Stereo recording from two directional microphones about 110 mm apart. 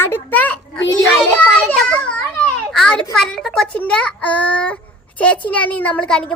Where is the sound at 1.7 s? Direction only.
10° left (ahead or behind).